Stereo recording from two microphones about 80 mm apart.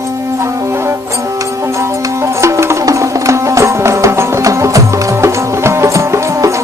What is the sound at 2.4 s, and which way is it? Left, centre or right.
Music, right.